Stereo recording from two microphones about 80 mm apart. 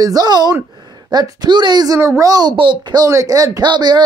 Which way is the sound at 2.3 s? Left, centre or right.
Right.